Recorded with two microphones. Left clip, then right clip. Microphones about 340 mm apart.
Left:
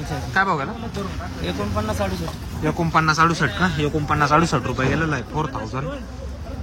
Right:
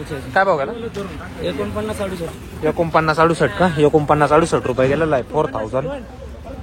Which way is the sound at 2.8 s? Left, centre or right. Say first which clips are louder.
Right 2 dB; centre.